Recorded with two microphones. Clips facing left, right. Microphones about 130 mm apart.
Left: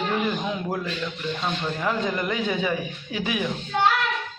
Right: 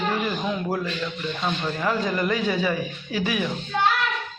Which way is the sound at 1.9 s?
20° left (ahead or behind).